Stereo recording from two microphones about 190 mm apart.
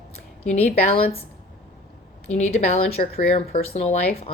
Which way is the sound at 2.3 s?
35° left (ahead or behind).